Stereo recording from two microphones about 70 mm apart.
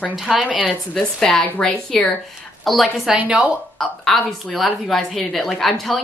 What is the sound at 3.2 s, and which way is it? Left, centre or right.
Speech, centre.